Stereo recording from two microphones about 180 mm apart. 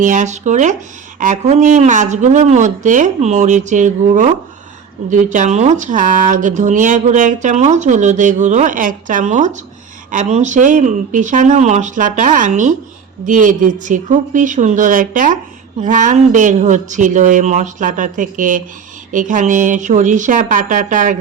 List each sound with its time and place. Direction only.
0.0 s speech: 45° right (ahead or behind)